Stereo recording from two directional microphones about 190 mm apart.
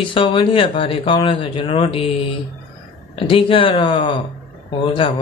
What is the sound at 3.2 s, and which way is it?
A man's voice, 25° left (ahead or behind).